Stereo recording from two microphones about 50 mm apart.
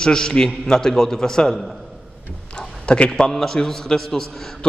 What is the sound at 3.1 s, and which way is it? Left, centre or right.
A man's voice, centre.